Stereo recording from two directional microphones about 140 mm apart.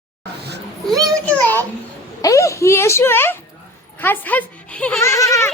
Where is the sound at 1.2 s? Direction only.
10° left (ahead or behind).